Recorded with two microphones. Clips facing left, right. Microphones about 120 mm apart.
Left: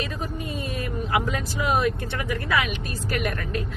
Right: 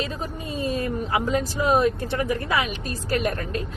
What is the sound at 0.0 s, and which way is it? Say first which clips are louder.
Speech: right 1 dB; 30° right (ahead or behind).